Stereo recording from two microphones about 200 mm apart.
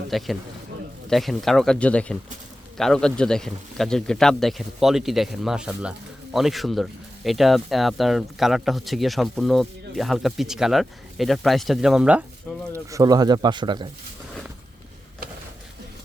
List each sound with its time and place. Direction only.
0.1 s speech: centre (ahead or behind)
12.5 s a sound: 5° left (ahead or behind)
12.9 s speech: 20° right (ahead or behind)